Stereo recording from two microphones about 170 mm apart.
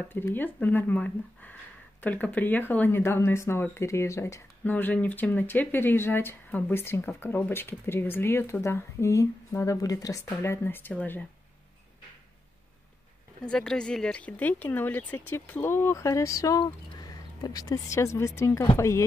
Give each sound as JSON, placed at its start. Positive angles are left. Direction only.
{"t": 0.1, "sound": "speech", "side_deg": 10}
{"t": 13.5, "sound": "speech", "side_deg": 5}